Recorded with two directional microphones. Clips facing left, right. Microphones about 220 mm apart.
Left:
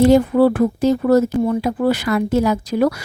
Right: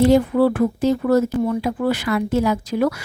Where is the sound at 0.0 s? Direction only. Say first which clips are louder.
Left 3 dB; 40° left (ahead or behind).